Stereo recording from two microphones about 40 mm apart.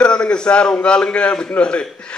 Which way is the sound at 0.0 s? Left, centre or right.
Left.